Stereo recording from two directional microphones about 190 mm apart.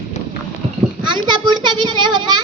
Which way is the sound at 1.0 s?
25° right (ahead or behind).